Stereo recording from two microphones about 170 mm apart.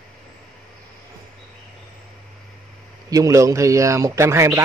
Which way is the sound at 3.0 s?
20° right (ahead or behind).